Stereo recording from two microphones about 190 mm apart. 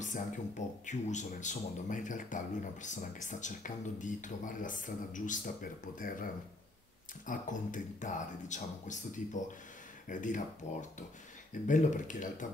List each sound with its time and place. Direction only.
0.0 s speech: 40° left (ahead or behind)